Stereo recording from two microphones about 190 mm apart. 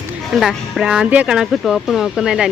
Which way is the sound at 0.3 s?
Centre (ahead or behind).